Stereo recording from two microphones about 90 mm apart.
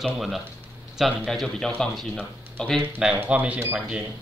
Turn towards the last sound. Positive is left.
turn(degrees=-10)  # may be behind; listen again after turning